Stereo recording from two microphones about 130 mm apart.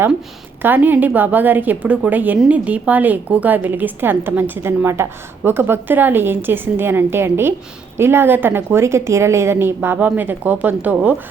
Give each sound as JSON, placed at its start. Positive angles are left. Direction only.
{"t": 0.6, "sound": "a woman's voice", "side_deg": -15}